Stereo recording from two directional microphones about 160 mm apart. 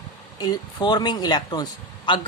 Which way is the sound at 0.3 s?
25° left (ahead or behind).